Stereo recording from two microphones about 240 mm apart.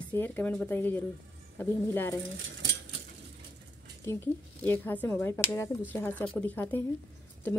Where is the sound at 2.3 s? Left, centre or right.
Right.